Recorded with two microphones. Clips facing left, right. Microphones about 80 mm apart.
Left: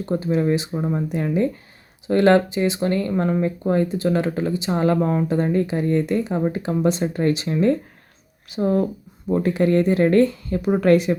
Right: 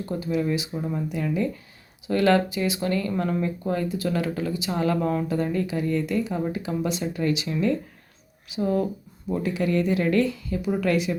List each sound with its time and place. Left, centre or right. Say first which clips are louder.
0.0 s a woman's voice: left 5 dB; left